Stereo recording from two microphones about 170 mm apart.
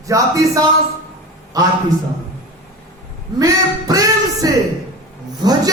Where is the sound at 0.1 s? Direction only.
20° right (ahead or behind).